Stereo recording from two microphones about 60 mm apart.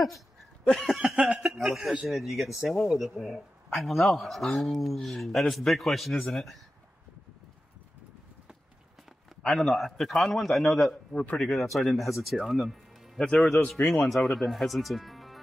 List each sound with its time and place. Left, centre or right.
0.8 s speech: centre
9.5 s a man's voice: centre